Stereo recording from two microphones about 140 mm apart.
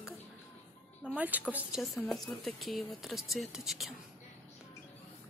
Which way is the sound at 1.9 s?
5° left (ahead or behind).